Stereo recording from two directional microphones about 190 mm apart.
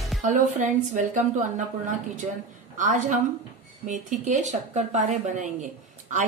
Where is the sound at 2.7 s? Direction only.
40° right (ahead or behind).